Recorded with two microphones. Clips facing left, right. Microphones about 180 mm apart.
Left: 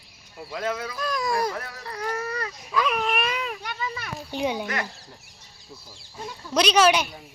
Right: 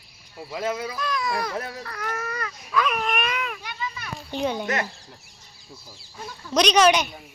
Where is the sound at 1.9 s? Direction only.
30° left (ahead or behind).